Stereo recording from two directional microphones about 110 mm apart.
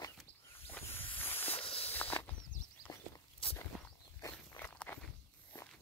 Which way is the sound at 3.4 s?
55° left (ahead or behind).